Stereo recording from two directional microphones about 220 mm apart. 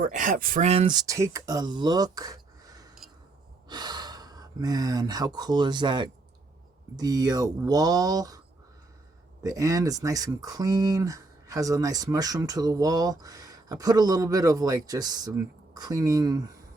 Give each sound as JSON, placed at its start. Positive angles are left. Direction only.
{"t": 0.0, "sound": "speech", "side_deg": -35}
{"t": 9.4, "sound": "speech", "side_deg": -15}